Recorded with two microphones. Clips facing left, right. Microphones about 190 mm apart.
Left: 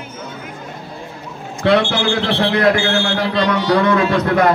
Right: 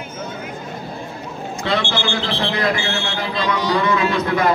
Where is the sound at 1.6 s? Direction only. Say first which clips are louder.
Left 7 dB; 65° left (ahead or behind).